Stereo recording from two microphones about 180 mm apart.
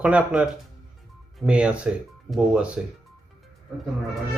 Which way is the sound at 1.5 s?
5° right (ahead or behind).